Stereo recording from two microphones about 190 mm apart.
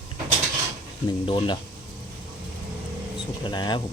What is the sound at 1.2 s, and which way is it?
Speech, 25° left (ahead or behind).